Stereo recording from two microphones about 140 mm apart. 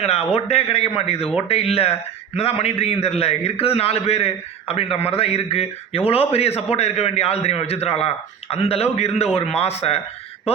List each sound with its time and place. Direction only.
0.3 s a man's voice: 45° left (ahead or behind)